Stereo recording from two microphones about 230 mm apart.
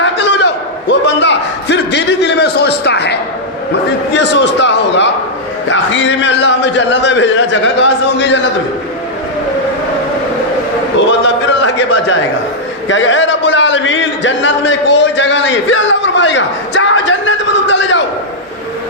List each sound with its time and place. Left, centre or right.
0.0 s a sound: left
4.1 s a man's voice: left
10.9 s a man's voice: left